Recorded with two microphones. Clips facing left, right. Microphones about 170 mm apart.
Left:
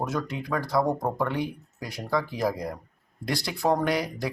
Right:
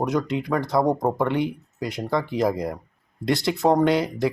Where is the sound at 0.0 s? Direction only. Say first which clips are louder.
Right 6 dB; 20° right (ahead or behind).